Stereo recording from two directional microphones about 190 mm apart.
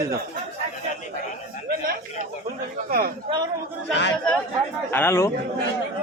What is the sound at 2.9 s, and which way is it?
Speech, 50° right (ahead or behind).